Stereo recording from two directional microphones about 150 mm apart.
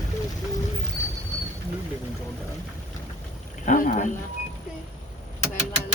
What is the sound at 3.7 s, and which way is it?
Speech, 65° left (ahead or behind).